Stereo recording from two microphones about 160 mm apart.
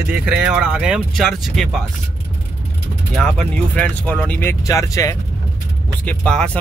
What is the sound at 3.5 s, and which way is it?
Speech, 10° left (ahead or behind).